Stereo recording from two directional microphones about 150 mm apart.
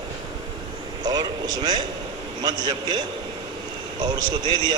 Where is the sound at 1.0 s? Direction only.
25° right (ahead or behind).